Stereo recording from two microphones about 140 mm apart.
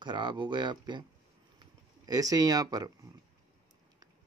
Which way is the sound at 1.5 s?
30° right (ahead or behind).